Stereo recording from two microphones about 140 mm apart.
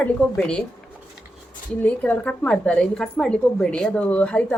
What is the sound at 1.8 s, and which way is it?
A woman's voice, 10° left (ahead or behind).